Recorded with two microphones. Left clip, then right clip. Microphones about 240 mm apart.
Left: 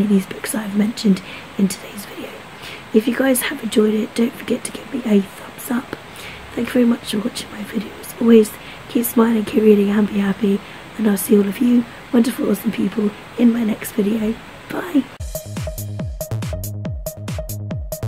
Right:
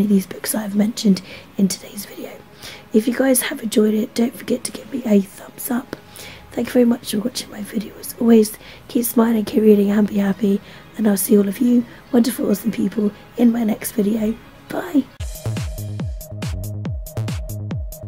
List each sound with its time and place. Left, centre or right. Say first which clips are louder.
0.2 s speech: even; centre
15.5 s music: left 2 dB; centre